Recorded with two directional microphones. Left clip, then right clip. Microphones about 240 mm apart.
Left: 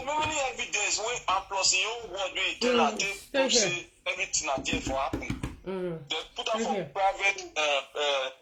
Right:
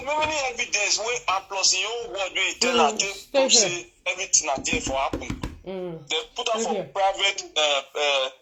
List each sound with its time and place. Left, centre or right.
0.0 s a man's voice: right